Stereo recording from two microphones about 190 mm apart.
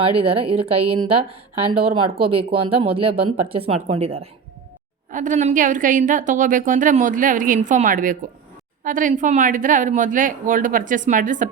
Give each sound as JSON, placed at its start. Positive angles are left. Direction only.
{"t": 0.0, "sound": "speech", "side_deg": -30}
{"t": 2.0, "sound": "a woman's voice", "side_deg": -55}
{"t": 2.6, "sound": "speech", "side_deg": -30}
{"t": 5.1, "sound": "a woman's voice", "side_deg": -40}